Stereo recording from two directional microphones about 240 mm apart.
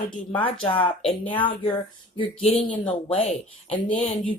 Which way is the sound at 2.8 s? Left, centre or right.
Left.